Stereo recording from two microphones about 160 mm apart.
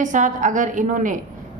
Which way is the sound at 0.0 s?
50° right (ahead or behind).